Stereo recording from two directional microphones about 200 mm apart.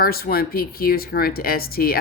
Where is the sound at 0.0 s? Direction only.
50° left (ahead or behind).